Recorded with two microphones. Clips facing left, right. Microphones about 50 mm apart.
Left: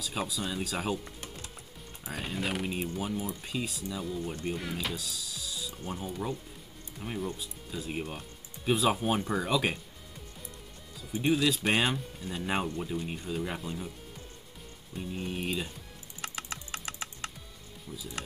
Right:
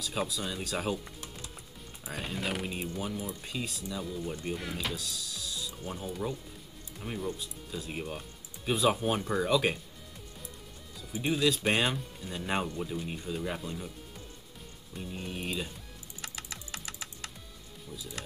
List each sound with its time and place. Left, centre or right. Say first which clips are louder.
0.0 s speech: even; centre
11.1 s speech: left 1 dB; centre
15.0 s speech: left 3 dB; centre
16.2 s typing: left 4 dB; left